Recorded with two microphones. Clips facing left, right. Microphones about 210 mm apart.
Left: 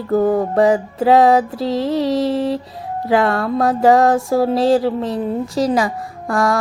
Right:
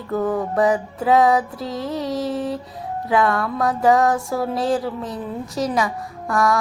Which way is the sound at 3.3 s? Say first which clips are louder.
Left 5 dB; 35° left (ahead or behind).